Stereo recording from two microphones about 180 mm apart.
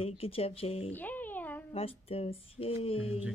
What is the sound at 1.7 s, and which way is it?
Speech, 35° left (ahead or behind).